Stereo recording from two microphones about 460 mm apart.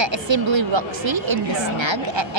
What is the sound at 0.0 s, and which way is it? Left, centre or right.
Speech, right.